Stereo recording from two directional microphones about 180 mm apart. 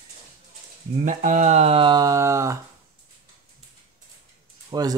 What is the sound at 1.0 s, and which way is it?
Speech, 45° right (ahead or behind).